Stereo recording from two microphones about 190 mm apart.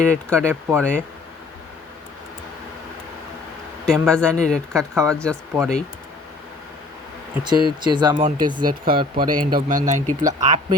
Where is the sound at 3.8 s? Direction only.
5° left (ahead or behind).